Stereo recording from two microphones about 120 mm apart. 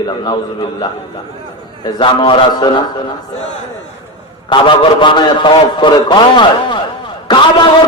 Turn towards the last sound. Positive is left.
turn(degrees=40)  # may be behind; listen again after turning